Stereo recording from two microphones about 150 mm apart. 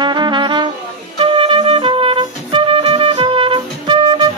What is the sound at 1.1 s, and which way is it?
Music, 35° right (ahead or behind).